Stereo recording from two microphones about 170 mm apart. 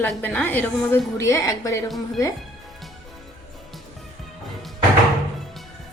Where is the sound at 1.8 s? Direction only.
Centre (ahead or behind).